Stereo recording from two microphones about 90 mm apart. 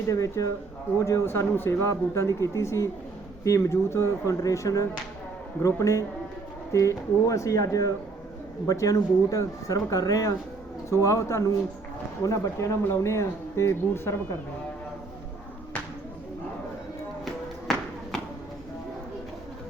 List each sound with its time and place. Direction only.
0.1 s speech: 35° left (ahead or behind)